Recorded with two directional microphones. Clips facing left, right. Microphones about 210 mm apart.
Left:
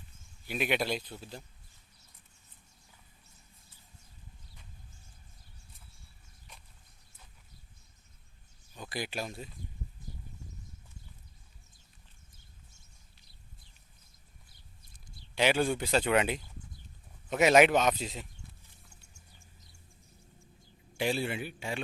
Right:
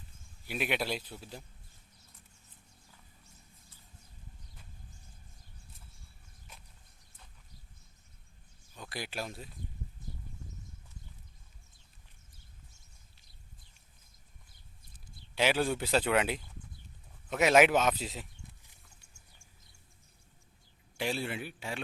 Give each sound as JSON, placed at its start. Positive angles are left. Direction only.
{"t": 0.4, "sound": "speech", "side_deg": 0}
{"t": 8.7, "sound": "speech", "side_deg": 0}
{"t": 15.4, "sound": "speech", "side_deg": 0}
{"t": 21.0, "sound": "speech", "side_deg": 0}